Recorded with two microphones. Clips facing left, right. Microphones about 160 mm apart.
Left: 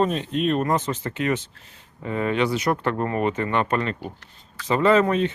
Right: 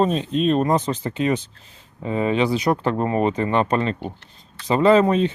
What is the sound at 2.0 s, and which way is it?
Speech, 20° right (ahead or behind).